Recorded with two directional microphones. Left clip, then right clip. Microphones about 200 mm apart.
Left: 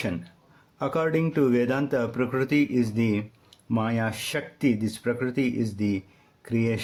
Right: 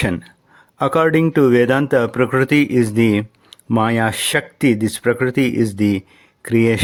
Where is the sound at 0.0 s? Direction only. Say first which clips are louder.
Right 10 dB; 40° right (ahead or behind).